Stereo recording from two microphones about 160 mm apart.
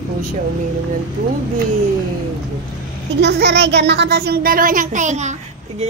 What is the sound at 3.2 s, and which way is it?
A child's voice, 90° right.